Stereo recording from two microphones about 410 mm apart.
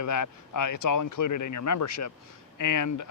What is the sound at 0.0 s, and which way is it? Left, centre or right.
Speech, left.